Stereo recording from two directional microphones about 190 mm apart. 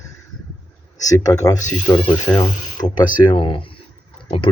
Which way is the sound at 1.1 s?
20° left (ahead or behind).